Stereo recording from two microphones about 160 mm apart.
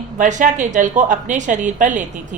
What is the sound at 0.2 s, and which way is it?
A woman's voice, 50° right (ahead or behind).